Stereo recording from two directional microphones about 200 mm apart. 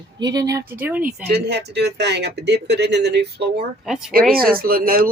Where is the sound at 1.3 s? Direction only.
55° right (ahead or behind).